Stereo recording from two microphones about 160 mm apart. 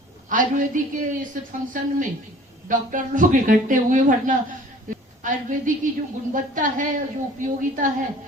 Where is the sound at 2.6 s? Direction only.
55° right (ahead or behind).